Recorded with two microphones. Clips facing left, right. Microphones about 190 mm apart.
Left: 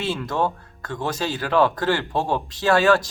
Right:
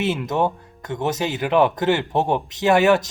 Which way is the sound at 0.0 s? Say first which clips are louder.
Right 3 dB; 20° right (ahead or behind).